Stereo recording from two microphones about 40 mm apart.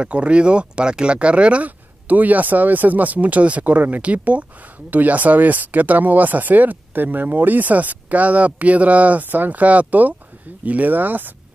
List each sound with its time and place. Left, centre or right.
0.0 s speech: right
2.0 s speech: right